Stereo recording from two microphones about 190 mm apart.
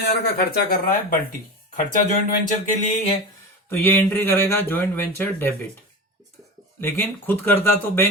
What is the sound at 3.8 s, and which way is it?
Speech, 10° left (ahead or behind).